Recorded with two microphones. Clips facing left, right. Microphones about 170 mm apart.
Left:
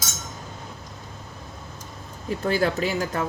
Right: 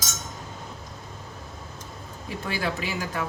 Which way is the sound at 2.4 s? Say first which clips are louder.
Left 7 dB; 40° left (ahead or behind).